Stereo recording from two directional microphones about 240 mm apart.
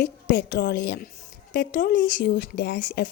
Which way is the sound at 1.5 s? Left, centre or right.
Left.